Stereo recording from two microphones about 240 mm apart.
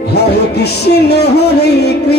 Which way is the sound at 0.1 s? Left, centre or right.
Left.